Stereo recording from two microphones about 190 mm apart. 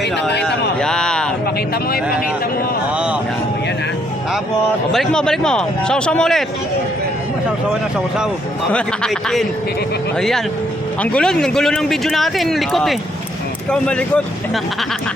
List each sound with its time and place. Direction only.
0.0 s speech: 65° left (ahead or behind)
0.4 s a sound: 5° left (ahead or behind)
4.9 s speech: 5° left (ahead or behind)
8.7 s speech: centre (ahead or behind)